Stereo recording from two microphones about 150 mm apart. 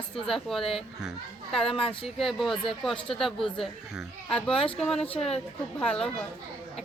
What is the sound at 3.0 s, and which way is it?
Speech, 35° left (ahead or behind).